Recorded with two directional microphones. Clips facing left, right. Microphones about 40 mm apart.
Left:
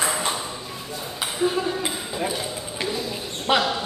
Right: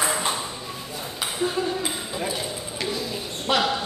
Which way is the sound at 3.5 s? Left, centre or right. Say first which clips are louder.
Left 2 dB; left.